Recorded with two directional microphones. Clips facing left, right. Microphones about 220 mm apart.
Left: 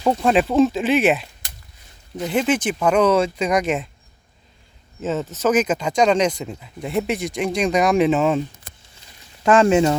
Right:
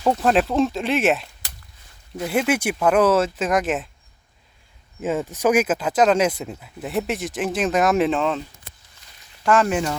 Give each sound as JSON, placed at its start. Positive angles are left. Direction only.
{"t": 0.0, "sound": "speech", "side_deg": 0}
{"t": 5.0, "sound": "speech", "side_deg": -10}
{"t": 8.7, "sound": "a sound", "side_deg": 45}
{"t": 9.4, "sound": "speech", "side_deg": 25}